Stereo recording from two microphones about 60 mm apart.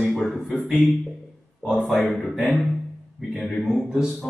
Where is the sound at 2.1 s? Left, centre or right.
Centre.